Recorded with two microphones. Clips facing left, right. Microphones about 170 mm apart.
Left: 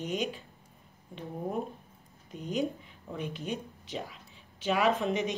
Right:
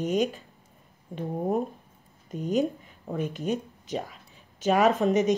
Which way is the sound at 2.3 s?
45° right (ahead or behind).